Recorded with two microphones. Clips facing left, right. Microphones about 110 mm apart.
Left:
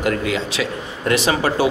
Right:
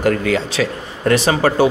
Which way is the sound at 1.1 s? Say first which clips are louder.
Right 3 dB; 40° right (ahead or behind).